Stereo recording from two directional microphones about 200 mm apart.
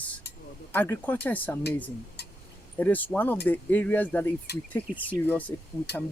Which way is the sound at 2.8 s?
10° left (ahead or behind).